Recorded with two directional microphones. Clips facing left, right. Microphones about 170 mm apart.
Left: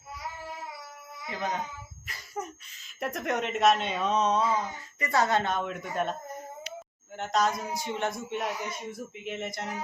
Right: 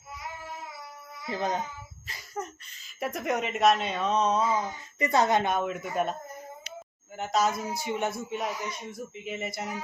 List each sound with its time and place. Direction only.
1.3 s speech: 35° right (ahead or behind)
2.3 s speech: 5° left (ahead or behind)
4.9 s speech: 20° right (ahead or behind)
7.2 s speech: 5° right (ahead or behind)